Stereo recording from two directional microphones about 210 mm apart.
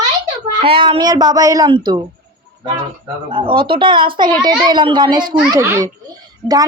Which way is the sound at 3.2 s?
25° right (ahead or behind).